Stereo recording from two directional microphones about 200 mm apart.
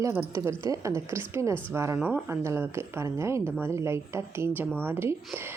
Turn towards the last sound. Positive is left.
turn(degrees=-10)  # may be behind; listen again after turning